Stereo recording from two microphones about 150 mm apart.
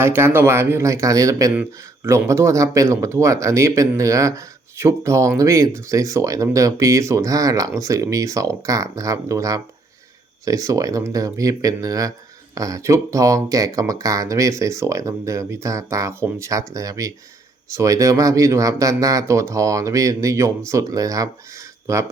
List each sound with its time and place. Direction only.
0.0 s speech: 15° right (ahead or behind)